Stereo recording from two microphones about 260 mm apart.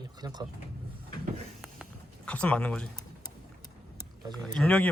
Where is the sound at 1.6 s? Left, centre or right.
Centre.